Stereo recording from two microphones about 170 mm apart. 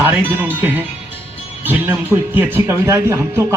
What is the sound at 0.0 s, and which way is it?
A man's voice, 10° right (ahead or behind).